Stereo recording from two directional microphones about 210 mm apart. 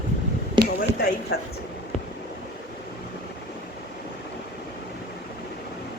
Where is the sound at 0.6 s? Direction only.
20° right (ahead or behind).